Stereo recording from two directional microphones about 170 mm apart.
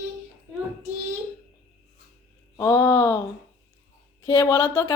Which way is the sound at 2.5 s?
20° left (ahead or behind).